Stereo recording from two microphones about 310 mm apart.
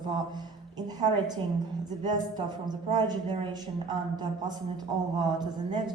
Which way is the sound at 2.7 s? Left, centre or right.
Centre.